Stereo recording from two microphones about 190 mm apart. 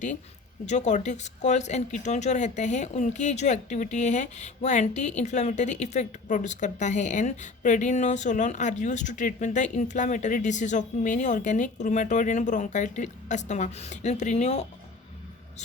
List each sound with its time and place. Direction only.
0.6 s speech: 40° left (ahead or behind)